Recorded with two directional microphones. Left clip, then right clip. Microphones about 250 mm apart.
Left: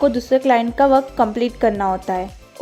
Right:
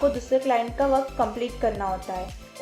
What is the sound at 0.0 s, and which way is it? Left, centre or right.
A woman's voice, left.